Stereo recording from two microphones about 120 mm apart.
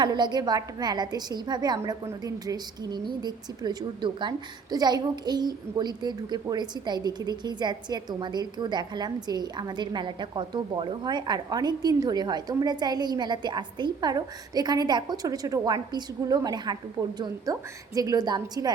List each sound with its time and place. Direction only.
0.0 s a woman's voice: 35° right (ahead or behind)